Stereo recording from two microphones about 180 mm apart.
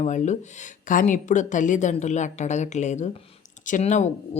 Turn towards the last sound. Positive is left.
turn(degrees=40)  # may be behind; listen again after turning